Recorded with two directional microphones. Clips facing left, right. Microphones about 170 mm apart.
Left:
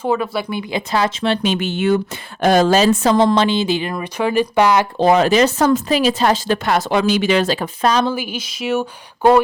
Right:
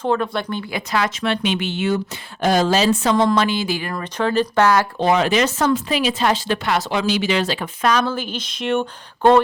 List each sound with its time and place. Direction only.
0.0 s speech: 5° left (ahead or behind)
0.7 s speech: 25° left (ahead or behind)
4.9 s speech: 40° left (ahead or behind)
8.0 s speech: 10° left (ahead or behind)